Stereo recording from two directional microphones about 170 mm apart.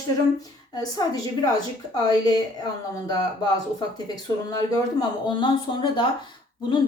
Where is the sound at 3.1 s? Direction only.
25° left (ahead or behind).